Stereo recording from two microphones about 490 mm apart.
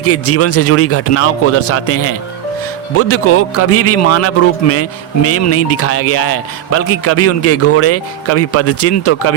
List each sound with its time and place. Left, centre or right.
0.0 s a man's voice: left